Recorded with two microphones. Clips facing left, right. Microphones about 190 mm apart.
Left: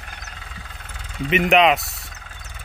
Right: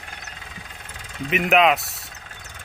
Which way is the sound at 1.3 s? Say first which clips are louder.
Left 2 dB; centre (ahead or behind).